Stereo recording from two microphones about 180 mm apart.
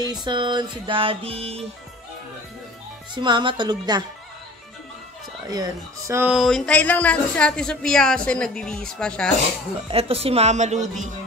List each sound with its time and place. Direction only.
0.0 s music: 25° right (ahead or behind)
3.2 s music: 25° right (ahead or behind)
5.5 s speech: 20° right (ahead or behind)
6.3 s a woman's voice: centre (ahead or behind)
9.8 s speech: 30° right (ahead or behind)